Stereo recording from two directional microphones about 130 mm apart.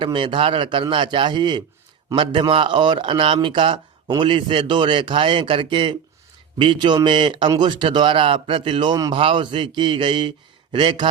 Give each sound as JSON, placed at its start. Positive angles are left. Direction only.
{"t": 0.0, "sound": "a man's voice", "side_deg": -40}